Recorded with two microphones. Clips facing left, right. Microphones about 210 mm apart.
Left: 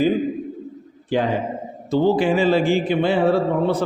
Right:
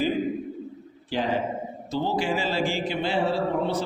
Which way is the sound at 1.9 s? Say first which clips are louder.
Left 9 dB; 55° left (ahead or behind).